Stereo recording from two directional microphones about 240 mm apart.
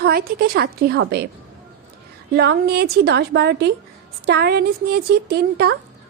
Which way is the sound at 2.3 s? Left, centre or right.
Right.